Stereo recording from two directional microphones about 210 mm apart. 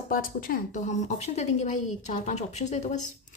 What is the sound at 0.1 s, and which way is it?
Speech, 40° left (ahead or behind).